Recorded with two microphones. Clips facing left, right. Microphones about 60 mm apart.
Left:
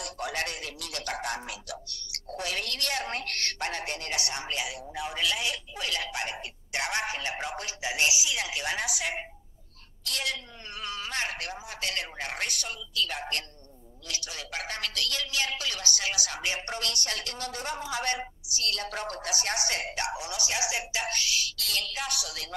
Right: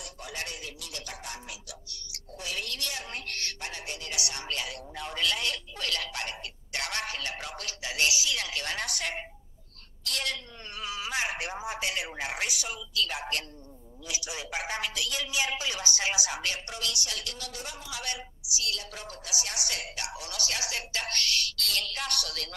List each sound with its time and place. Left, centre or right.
0.0 s music: left
4.3 s a woman's voice: centre
10.0 s a sound: centre
11.3 s a woman's voice: right; by 13.5 s centre
14.0 s a man's voice: centre
16.6 s a woman's voice: left; by 22.5 s centre